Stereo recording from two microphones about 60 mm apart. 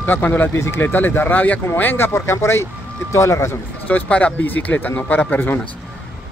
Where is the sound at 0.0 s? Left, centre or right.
Left.